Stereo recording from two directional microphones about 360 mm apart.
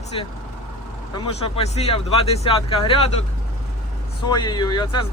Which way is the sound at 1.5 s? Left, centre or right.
Centre.